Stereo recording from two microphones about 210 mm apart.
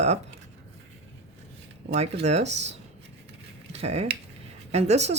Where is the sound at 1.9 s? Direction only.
30° right (ahead or behind).